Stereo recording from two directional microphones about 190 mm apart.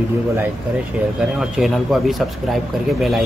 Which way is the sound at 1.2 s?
Centre (ahead or behind).